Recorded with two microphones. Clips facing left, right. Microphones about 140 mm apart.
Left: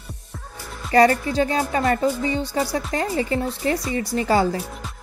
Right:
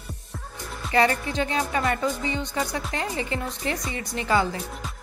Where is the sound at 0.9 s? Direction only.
40° left (ahead or behind).